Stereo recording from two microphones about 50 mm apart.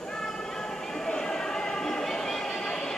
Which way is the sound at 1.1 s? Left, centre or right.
Centre.